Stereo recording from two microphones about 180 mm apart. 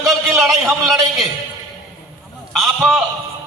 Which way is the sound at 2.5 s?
Centre (ahead or behind).